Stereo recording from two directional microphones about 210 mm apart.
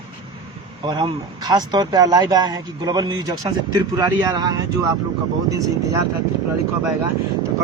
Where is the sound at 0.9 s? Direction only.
20° right (ahead or behind).